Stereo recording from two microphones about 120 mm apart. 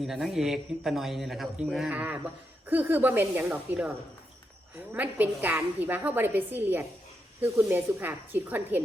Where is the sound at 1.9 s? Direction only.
15° right (ahead or behind).